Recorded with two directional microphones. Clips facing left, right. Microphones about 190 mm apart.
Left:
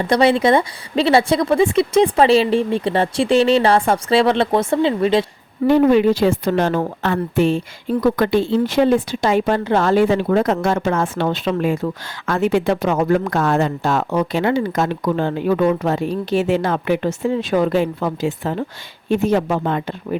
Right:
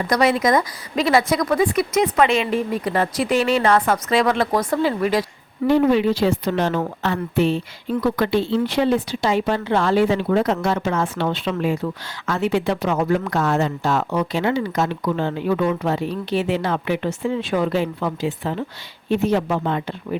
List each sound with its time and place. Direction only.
0.0 s speech: 30° left (ahead or behind)
5.6 s a woman's voice: 50° left (ahead or behind)